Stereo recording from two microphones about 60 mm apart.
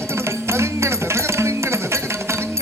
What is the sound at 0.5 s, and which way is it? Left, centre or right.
Music, right.